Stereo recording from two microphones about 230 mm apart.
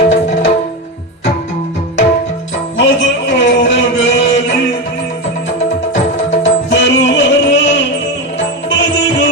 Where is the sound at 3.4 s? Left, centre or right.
Left.